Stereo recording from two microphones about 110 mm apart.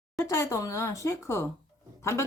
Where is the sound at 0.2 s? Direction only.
25° left (ahead or behind).